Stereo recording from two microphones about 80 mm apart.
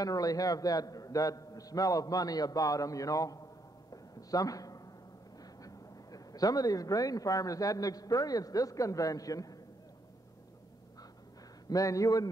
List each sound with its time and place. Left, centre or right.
0.0 s a man's voice: left
3.9 s a sound: left
5.4 s speech: left
11.6 s a man's voice: left